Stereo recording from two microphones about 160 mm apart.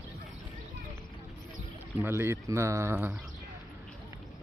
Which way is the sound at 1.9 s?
15° right (ahead or behind).